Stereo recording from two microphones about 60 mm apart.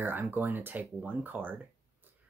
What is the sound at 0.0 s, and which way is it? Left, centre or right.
Speech, right.